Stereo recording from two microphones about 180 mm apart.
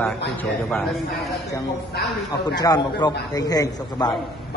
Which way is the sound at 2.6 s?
20° left (ahead or behind).